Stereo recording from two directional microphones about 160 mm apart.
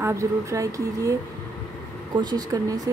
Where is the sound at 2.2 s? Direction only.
25° right (ahead or behind).